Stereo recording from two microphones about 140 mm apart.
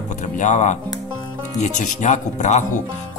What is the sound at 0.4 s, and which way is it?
A man's voice, 55° left (ahead or behind).